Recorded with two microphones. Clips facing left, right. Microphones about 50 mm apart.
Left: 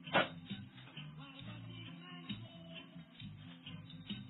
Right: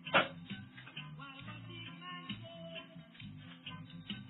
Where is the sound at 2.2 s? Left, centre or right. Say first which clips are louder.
Right 3 dB; right.